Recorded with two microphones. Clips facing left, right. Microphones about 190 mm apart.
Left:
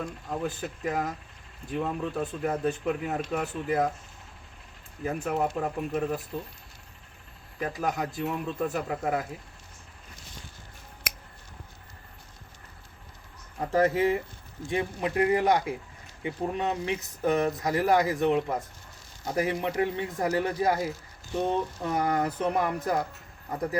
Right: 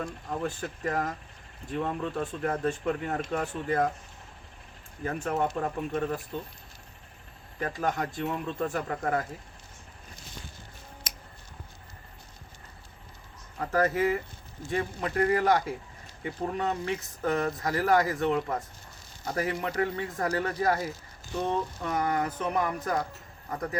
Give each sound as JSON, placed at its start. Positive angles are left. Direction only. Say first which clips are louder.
{"t": 0.0, "sound": "speech", "louder": "even", "side_deg": 5}
{"t": 5.0, "sound": "speech", "louder": "left 1 dB", "side_deg": 5}
{"t": 7.6, "sound": "speech", "louder": "even", "side_deg": 10}
{"t": 13.6, "sound": "speech", "louder": "left 2 dB", "side_deg": 25}
{"t": 21.4, "sound": "speech", "louder": "left 1 dB", "side_deg": 30}